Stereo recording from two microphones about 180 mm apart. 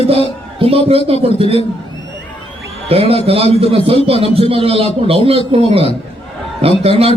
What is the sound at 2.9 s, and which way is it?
A man's voice, 30° right (ahead or behind).